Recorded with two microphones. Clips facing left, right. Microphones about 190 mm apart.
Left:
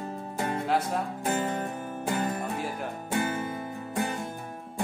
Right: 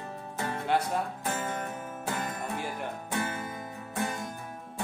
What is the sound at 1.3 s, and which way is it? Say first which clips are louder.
Music: left 5 dB; 30° left (ahead or behind).